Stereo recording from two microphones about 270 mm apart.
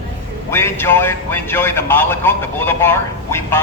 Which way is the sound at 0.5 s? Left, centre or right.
Centre.